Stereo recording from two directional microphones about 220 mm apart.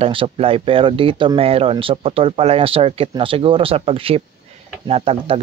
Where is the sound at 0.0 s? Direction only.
25° right (ahead or behind).